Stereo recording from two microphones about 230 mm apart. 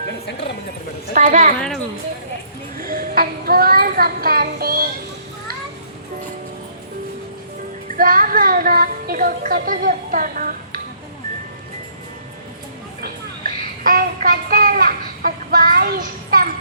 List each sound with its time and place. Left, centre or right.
1.1 s a woman's voice: right
1.5 s speech: centre
2.8 s child singing: right
7.9 s child singing: right
13.0 s child singing: right